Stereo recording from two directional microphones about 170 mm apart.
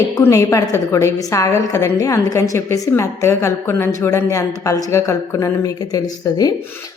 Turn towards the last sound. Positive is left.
turn(degrees=20)  # may be behind; listen again after turning